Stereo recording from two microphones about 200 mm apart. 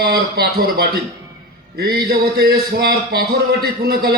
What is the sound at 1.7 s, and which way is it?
Speech, 50° right (ahead or behind).